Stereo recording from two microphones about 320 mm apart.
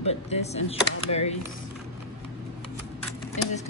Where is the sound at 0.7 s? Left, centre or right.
Centre.